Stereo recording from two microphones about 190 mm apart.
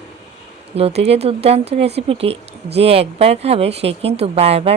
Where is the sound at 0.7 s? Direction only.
30° right (ahead or behind).